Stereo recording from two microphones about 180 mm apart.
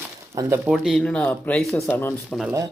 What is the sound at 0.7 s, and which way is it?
Speech, centre (ahead or behind).